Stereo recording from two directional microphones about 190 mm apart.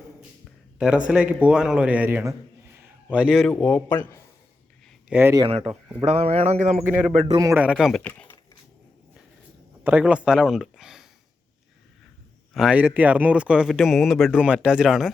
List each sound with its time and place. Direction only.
0.8 s a man's voice: 5° right (ahead or behind)
5.0 s speech: 10° right (ahead or behind)
5.4 s a man's voice: 30° right (ahead or behind)
6.8 s a man's voice: 5° right (ahead or behind)
9.8 s a man's voice: 5° right (ahead or behind)
12.5 s a man's voice: 5° right (ahead or behind)